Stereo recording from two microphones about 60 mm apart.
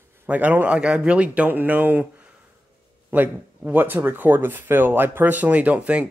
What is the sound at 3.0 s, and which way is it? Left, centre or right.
Speech, right.